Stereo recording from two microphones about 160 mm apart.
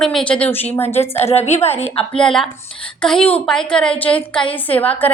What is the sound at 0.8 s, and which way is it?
A woman's voice, 40° left (ahead or behind).